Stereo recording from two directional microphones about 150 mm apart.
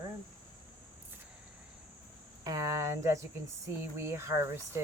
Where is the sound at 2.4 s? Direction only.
25° right (ahead or behind).